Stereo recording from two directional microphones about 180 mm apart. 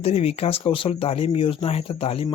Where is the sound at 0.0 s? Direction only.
35° left (ahead or behind).